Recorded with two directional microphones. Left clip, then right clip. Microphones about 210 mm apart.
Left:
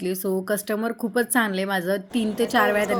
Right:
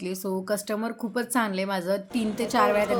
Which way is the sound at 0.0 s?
10° left (ahead or behind).